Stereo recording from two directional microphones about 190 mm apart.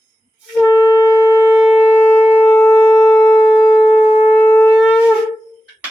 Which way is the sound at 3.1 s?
15° left (ahead or behind).